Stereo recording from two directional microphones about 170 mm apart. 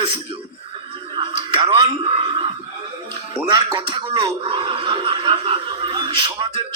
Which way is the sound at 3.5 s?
25° right (ahead or behind).